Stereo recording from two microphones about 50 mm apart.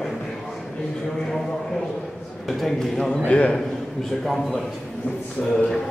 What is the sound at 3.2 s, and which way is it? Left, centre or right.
Speech, left.